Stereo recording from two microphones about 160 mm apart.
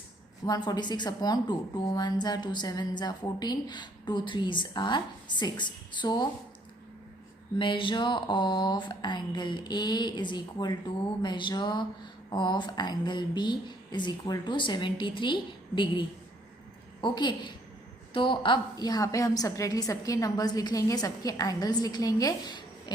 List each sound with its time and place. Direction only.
0.4 s a woman's voice: 25° left (ahead or behind)
7.6 s a woman's voice: 30° left (ahead or behind)